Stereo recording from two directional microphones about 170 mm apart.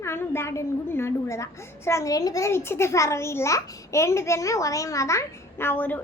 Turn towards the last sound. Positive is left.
turn(degrees=10)  # may be behind; listen again after turning